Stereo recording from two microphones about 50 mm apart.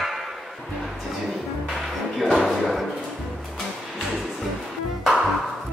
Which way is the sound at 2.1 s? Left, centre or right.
Centre.